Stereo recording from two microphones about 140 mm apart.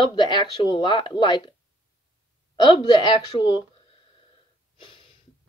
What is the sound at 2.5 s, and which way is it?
Speech, 30° left (ahead or behind).